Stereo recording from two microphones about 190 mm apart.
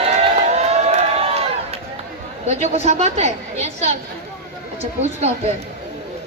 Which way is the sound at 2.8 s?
35° right (ahead or behind).